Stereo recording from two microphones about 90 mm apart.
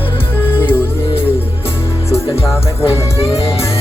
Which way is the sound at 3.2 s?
90° left.